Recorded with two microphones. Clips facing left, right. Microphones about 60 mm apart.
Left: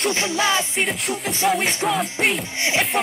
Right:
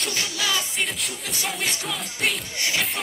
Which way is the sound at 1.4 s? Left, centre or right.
Left.